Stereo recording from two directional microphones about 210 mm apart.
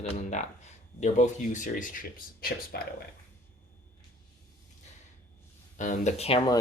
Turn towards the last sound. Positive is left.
turn(degrees=25)  # may be behind; listen again after turning